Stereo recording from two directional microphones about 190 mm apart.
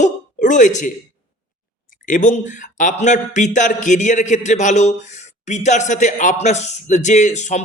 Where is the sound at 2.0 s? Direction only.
40° left (ahead or behind).